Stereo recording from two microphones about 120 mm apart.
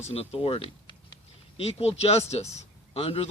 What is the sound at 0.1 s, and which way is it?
Speech, 60° left (ahead or behind).